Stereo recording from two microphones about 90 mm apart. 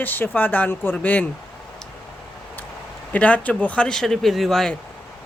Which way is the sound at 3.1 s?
15° left (ahead or behind).